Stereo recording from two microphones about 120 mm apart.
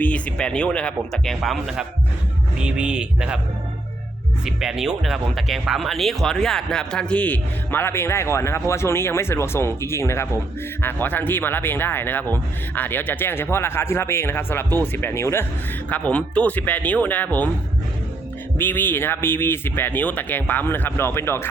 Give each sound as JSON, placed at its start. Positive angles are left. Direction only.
{"t": 0.0, "sound": "a man's voice", "side_deg": 10}
{"t": 4.4, "sound": "speech", "side_deg": -5}
{"t": 15.9, "sound": "speech", "side_deg": 10}
{"t": 18.5, "sound": "speech", "side_deg": 15}